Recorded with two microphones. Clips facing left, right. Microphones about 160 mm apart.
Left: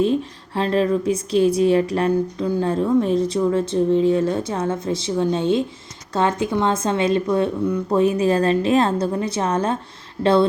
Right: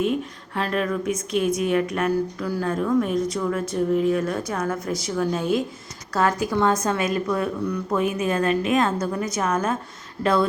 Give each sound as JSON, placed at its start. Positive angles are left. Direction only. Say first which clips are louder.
{"t": 0.0, "sound": "speech", "louder": "left 4 dB", "side_deg": 30}